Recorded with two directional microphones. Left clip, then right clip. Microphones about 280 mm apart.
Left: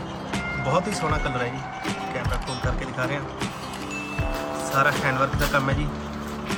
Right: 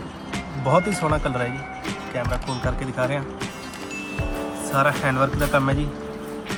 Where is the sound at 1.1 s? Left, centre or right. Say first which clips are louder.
Right 2 dB; centre.